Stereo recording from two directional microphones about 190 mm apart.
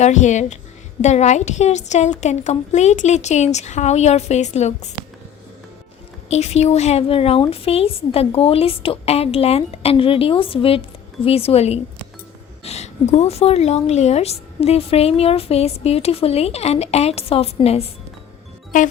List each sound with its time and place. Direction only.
0.0 s a woman's voice: 40° left (ahead or behind)
6.3 s a woman's voice: 35° left (ahead or behind)